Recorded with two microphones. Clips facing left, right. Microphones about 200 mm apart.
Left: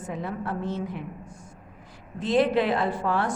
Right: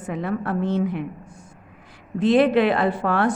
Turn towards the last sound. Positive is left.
turn(degrees=-65)  # may be behind; listen again after turning